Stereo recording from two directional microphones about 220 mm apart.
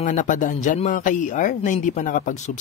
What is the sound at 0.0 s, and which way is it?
Speech, 35° left (ahead or behind).